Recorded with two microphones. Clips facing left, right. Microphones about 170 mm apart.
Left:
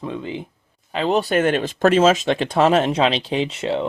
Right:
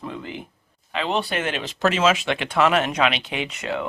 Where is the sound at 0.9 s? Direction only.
40° left (ahead or behind).